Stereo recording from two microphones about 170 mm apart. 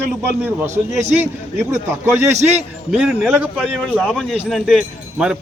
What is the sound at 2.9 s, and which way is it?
Speech, 5° right (ahead or behind).